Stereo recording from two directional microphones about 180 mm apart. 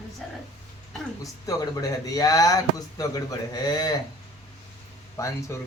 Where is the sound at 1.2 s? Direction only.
20° left (ahead or behind).